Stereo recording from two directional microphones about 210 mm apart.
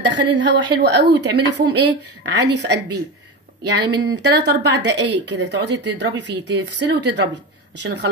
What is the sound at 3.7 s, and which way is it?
A woman's voice, 50° right (ahead or behind).